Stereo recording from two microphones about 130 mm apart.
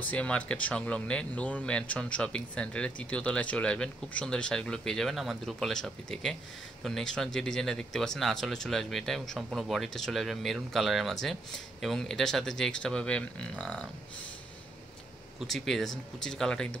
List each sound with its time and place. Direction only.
0.0 s speech: 10° left (ahead or behind)
15.4 s speech: centre (ahead or behind)